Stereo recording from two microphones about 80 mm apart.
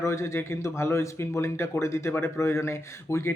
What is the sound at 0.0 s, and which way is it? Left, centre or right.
Speech, left.